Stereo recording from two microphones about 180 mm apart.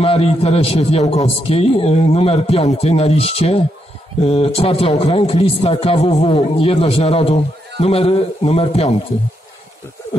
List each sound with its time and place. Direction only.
0.0 s a man's voice: 30° left (ahead or behind)